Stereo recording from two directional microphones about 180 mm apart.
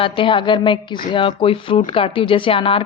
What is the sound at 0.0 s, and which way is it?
Speech, 30° left (ahead or behind).